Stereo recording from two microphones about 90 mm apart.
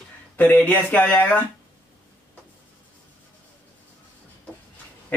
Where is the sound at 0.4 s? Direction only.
20° left (ahead or behind).